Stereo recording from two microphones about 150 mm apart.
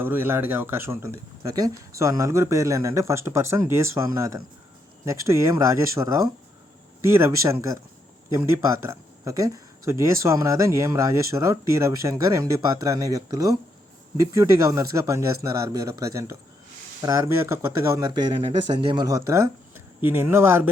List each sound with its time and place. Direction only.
0.0 s speech: 15° right (ahead or behind)
18.3 s speech: 35° right (ahead or behind); by 20.7 s 15° right (ahead or behind)